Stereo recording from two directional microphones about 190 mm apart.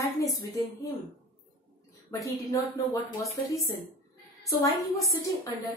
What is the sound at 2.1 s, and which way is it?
Speech, 15° left (ahead or behind).